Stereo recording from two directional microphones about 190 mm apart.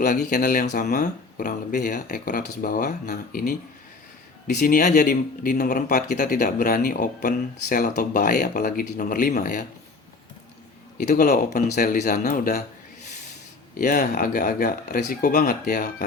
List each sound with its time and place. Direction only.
0.0 s speech: 45° left (ahead or behind)
10.9 s speech: 45° left (ahead or behind)
13.7 s speech: 45° left (ahead or behind)